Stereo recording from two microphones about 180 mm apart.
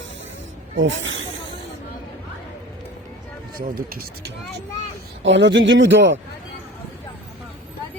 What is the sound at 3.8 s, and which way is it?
Speech, 55° right (ahead or behind).